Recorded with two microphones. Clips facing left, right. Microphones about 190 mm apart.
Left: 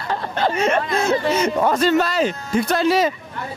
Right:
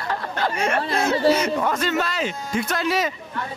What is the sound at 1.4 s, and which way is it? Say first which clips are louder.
Speech: left 4 dB; 35° left (ahead or behind).